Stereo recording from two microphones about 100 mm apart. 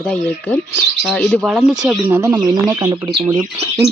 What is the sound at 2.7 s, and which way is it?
Speech, 30° right (ahead or behind).